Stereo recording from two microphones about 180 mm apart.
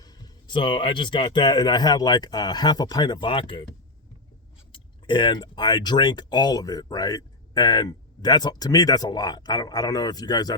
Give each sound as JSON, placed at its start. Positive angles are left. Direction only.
{"t": 0.0, "sound": "speech", "side_deg": 25}
{"t": 4.7, "sound": "speech", "side_deg": 25}